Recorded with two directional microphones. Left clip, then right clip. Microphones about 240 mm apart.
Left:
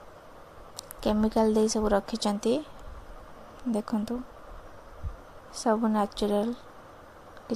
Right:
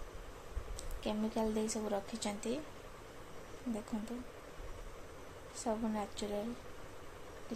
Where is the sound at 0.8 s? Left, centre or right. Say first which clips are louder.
Left 12 dB; left.